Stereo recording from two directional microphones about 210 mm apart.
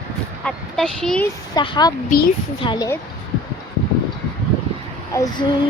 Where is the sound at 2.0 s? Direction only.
45° left (ahead or behind).